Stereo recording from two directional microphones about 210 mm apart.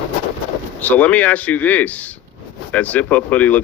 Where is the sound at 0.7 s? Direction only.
5° left (ahead or behind).